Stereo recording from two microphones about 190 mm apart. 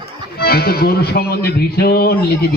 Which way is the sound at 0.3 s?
55° left (ahead or behind).